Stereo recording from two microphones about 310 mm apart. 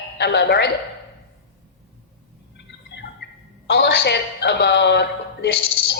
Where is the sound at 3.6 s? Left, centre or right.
Left.